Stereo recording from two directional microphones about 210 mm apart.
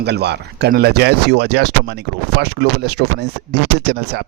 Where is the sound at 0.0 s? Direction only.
55° right (ahead or behind).